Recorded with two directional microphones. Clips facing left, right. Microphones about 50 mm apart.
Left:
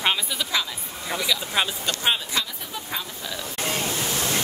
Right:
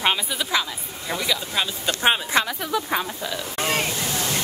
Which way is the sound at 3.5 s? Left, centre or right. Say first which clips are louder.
Right 4 dB; right.